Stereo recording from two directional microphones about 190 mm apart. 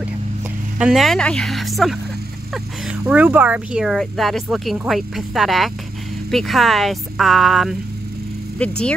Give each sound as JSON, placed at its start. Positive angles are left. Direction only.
{"t": 0.7, "sound": "speech", "side_deg": 0}
{"t": 3.1, "sound": "speech", "side_deg": -10}